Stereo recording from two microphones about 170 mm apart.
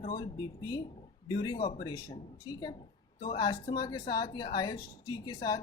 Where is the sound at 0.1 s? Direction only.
25° left (ahead or behind).